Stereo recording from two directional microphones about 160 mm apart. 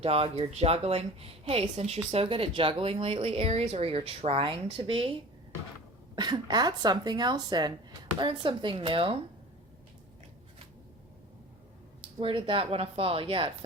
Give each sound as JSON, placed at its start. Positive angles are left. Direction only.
{"t": 0.0, "sound": "a woman's voice", "side_deg": -40}
{"t": 6.1, "sound": "a woman's voice", "side_deg": -25}
{"t": 12.2, "sound": "a woman's voice", "side_deg": -35}